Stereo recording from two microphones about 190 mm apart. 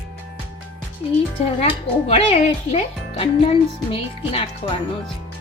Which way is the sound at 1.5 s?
35° left (ahead or behind).